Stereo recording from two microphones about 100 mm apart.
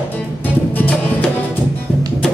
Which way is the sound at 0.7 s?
15° left (ahead or behind).